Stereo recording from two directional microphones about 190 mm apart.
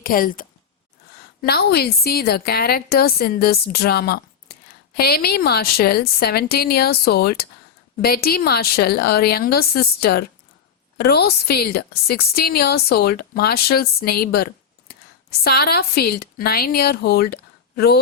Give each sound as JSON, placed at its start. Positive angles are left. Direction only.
{"t": 0.0, "sound": "a woman's voice", "side_deg": 50}